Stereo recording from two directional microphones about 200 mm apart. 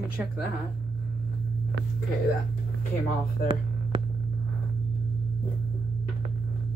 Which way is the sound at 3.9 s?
25° right (ahead or behind).